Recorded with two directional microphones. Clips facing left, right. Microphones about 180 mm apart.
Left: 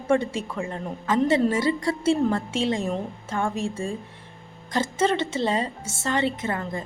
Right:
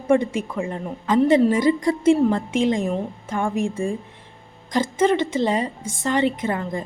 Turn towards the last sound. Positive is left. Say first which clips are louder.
# right 4 dB
turn(degrees=-15)  # may be behind; listen again after turning